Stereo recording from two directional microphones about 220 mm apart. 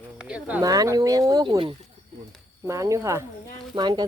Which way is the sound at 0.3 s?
5° right (ahead or behind).